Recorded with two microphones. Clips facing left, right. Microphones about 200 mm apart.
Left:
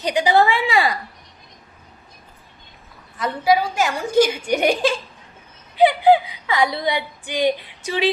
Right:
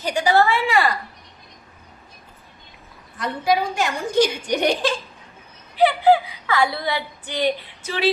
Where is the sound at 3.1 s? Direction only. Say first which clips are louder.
Left 3 dB; 5° left (ahead or behind).